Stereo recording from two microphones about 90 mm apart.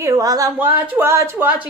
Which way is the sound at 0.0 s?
40° right (ahead or behind).